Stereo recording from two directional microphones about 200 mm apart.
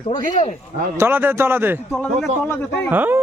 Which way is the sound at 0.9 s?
10° right (ahead or behind).